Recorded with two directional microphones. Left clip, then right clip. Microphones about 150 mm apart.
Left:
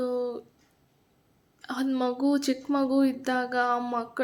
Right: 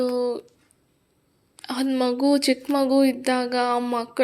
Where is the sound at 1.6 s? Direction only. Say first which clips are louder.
Right 5 dB; 10° right (ahead or behind).